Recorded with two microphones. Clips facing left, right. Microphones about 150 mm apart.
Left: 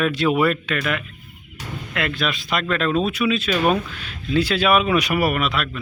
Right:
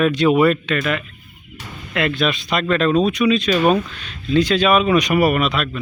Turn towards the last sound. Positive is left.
turn(degrees=0)  # may be behind; listen again after turning